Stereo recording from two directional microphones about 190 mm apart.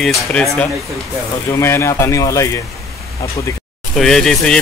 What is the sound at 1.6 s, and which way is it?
Speech, 15° left (ahead or behind).